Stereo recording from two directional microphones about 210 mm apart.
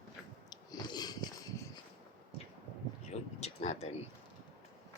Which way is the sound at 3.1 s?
30° left (ahead or behind).